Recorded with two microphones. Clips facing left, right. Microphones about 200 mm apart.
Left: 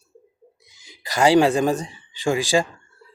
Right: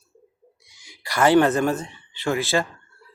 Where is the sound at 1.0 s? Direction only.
20° left (ahead or behind).